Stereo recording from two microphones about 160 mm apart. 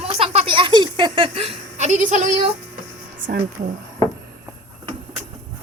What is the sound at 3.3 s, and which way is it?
Speech, 70° right (ahead or behind).